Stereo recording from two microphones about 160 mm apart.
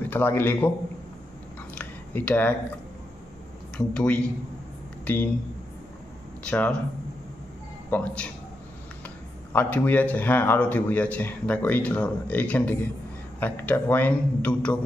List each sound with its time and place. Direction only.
0.1 s a man's voice: 15° left (ahead or behind)
1.8 s a sound: 10° left (ahead or behind)
3.7 s a man's voice: 5° left (ahead or behind)
6.4 s a man's voice: 10° left (ahead or behind)
7.9 s a man's voice: 10° left (ahead or behind)
9.5 s a man's voice: 10° left (ahead or behind)